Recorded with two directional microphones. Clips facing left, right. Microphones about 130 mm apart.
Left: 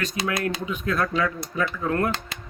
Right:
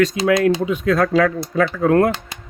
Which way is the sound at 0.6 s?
90° right.